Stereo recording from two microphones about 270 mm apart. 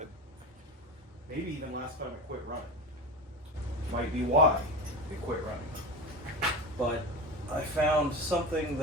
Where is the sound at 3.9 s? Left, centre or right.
Right.